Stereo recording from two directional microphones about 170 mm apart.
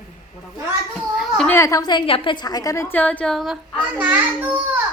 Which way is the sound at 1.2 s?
5° left (ahead or behind).